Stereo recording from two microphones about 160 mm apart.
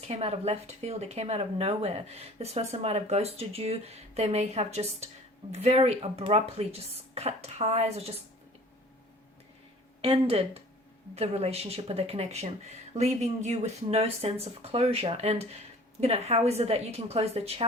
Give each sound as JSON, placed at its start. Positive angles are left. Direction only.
{"t": 0.1, "sound": "speech", "side_deg": -40}
{"t": 10.0, "sound": "speech", "side_deg": -35}